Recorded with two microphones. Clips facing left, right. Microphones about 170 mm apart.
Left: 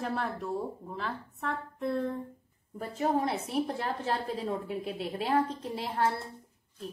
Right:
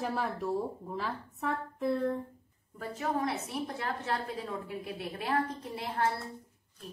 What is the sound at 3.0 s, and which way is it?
A woman's voice, 30° left (ahead or behind).